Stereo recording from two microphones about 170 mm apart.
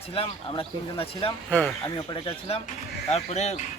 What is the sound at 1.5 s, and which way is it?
Speech, 10° left (ahead or behind).